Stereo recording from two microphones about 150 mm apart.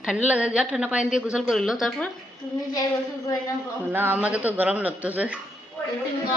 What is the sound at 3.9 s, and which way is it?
Speech, 15° right (ahead or behind).